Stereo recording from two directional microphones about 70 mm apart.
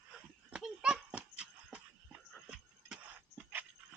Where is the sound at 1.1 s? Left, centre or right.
Centre.